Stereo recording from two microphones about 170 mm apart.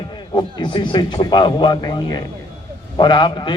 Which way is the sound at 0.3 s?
25° left (ahead or behind).